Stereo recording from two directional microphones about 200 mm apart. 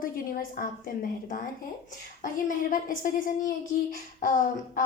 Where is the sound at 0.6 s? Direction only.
45° left (ahead or behind).